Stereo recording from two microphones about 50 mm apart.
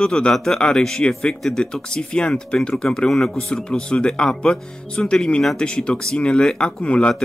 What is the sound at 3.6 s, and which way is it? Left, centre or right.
Speech, centre.